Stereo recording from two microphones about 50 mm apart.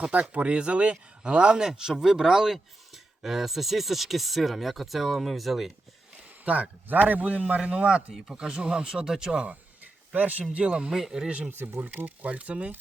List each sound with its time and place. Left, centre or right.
0.1 s speech: right; by 5.7 s centre
6.4 s a man's voice: right
7.4 s speech: right
9.5 s a sound: right
10.5 s speech: right
10.9 s speech: centre
11.3 s speech: right
11.8 s speech: right